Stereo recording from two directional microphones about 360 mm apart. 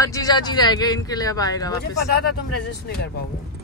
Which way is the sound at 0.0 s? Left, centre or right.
Centre.